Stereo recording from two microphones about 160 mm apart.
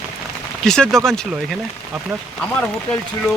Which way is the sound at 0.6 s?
5° left (ahead or behind).